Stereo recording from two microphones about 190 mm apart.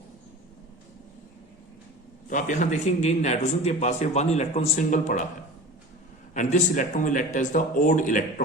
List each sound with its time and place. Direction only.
2.2 s a man's voice: 40° left (ahead or behind)
6.3 s a man's voice: 40° left (ahead or behind)